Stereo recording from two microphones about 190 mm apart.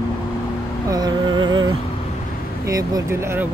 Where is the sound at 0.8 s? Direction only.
20° right (ahead or behind).